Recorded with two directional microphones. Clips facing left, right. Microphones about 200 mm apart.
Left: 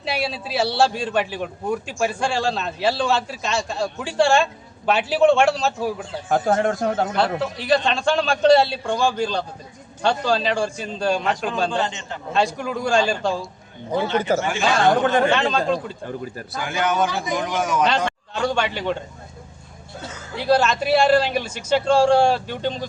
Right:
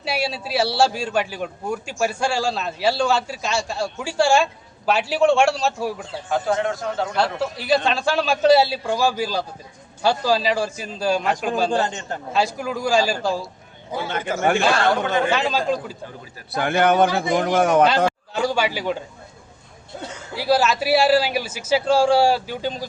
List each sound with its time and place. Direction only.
0.0 s a man's voice: centre (ahead or behind)
6.2 s a man's voice: 50° left (ahead or behind)
7.2 s a man's voice: centre (ahead or behind)
11.8 s a man's voice: 45° right (ahead or behind)
12.3 s a man's voice: centre (ahead or behind)
14.3 s a man's voice: 40° left (ahead or behind)
14.8 s a man's voice: 50° left (ahead or behind)
15.3 s a man's voice: 5° right (ahead or behind)
16.6 s a man's voice: 55° right (ahead or behind)
17.8 s speech: 5° right (ahead or behind)
20.3 s a man's voice: 5° right (ahead or behind)